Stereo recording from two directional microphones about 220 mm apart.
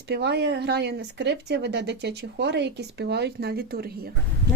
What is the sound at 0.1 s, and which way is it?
Speech, 50° right (ahead or behind).